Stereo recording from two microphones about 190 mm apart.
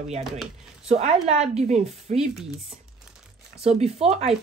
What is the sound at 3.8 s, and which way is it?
Speech, 35° right (ahead or behind).